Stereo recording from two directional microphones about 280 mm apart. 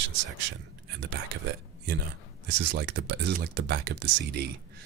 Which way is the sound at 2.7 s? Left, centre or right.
Right.